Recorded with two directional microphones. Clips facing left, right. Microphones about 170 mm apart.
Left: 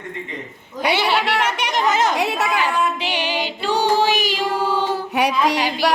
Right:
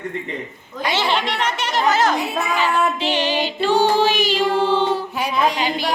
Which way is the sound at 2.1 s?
90° left.